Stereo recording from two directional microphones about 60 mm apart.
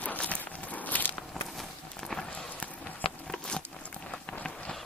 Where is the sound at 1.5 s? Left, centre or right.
Centre.